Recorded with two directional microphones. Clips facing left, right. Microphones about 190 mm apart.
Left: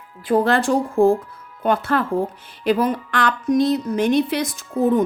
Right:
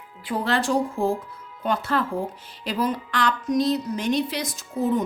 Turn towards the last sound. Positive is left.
turn(degrees=55)  # may be behind; listen again after turning